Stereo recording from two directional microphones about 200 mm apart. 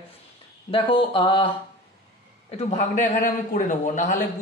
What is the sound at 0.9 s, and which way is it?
Speech, 25° left (ahead or behind).